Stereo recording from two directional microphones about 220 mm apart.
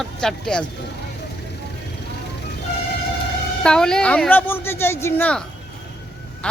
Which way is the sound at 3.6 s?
5° left (ahead or behind).